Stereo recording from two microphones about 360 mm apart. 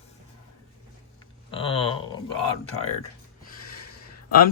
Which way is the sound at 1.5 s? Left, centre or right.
Centre.